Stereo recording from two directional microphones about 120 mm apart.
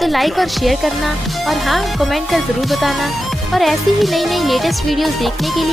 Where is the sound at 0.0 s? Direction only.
Centre (ahead or behind).